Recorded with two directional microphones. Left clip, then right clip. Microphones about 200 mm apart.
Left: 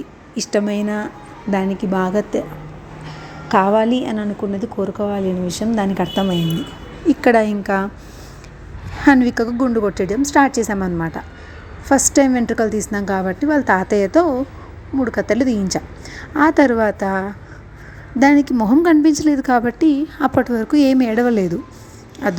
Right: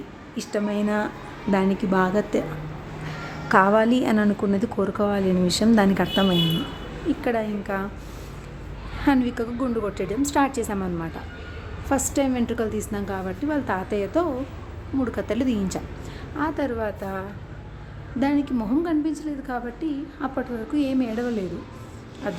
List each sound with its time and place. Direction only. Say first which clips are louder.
0.3 s a woman's voice: left 7 dB; 25° left (ahead or behind)
3.5 s a woman's voice: left 3 dB; 10° left (ahead or behind)
7.1 s a woman's voice: left 11 dB; 35° left (ahead or behind)
9.0 s a woman's voice: left 9 dB; 30° left (ahead or behind)